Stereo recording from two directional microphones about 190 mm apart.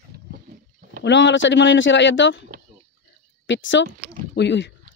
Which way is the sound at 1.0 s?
70° left (ahead or behind).